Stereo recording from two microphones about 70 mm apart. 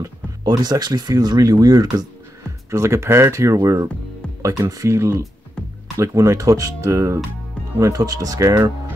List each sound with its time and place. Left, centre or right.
0.0 s speech: right
2.7 s speech: right
7.8 s speech: right